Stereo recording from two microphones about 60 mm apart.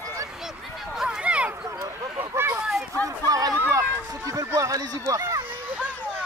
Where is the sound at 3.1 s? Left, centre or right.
Right.